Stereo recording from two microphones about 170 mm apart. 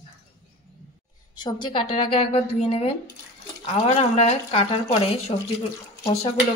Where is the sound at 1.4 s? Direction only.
25° left (ahead or behind).